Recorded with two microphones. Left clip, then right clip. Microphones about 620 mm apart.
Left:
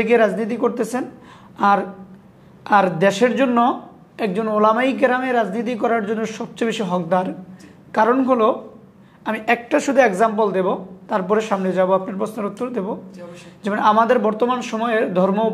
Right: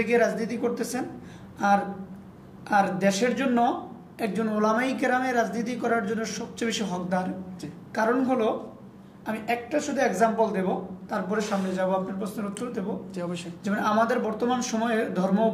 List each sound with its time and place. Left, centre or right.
0.0 s a woman's voice: left
2.6 s a woman's voice: left
9.2 s a woman's voice: left